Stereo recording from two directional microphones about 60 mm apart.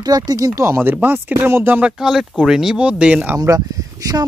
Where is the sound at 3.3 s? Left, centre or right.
Right.